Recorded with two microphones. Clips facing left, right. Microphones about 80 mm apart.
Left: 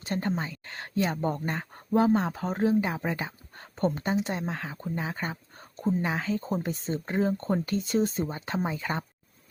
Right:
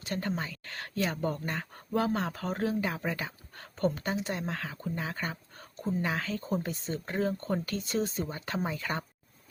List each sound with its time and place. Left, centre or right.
0.0 s speech: left